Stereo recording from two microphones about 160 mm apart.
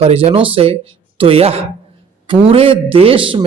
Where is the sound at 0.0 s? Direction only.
40° right (ahead or behind).